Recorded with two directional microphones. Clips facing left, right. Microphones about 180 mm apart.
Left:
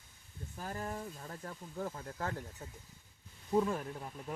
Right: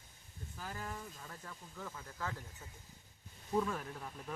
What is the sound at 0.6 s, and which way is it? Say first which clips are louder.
Speech: left 5 dB; 35° left (ahead or behind).